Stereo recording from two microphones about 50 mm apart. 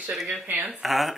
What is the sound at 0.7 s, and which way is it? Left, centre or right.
Speech, centre.